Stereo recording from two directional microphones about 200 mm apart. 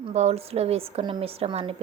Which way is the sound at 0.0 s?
35° right (ahead or behind).